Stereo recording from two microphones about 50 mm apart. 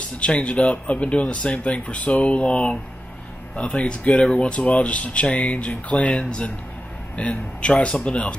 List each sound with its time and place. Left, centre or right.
0.2 s speech: left